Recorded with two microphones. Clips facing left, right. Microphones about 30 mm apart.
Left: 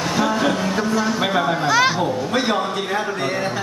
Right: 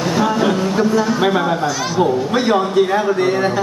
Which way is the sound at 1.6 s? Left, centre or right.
Left.